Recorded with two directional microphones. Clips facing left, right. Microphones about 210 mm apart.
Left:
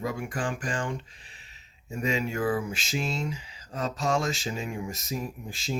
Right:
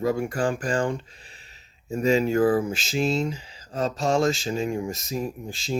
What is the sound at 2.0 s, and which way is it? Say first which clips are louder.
Speech: right 8 dB; 35° right (ahead or behind).